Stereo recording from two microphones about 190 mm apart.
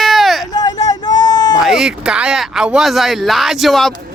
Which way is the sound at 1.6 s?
Centre (ahead or behind).